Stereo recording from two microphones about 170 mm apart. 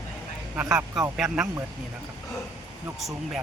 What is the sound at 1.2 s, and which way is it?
Speech, 20° right (ahead or behind).